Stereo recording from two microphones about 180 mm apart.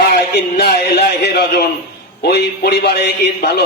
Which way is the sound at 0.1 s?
60° left (ahead or behind).